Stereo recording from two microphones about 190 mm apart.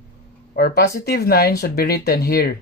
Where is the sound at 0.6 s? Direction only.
55° left (ahead or behind).